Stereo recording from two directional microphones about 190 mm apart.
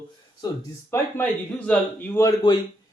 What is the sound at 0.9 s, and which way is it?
Speech, 10° left (ahead or behind).